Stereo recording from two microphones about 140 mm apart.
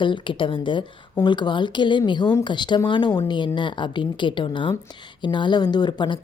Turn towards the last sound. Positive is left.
turn(degrees=30)  # may be behind; listen again after turning